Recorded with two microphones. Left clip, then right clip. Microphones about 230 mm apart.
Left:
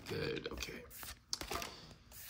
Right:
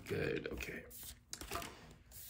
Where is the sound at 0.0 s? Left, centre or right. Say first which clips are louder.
Right 1 dB; centre.